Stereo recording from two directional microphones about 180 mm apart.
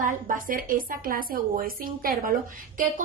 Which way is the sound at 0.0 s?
50° right (ahead or behind).